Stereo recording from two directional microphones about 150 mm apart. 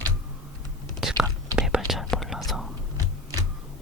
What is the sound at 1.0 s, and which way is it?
Whispering, 5° right (ahead or behind).